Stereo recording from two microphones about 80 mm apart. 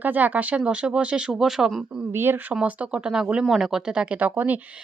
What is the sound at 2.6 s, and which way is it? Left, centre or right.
A woman's voice, centre.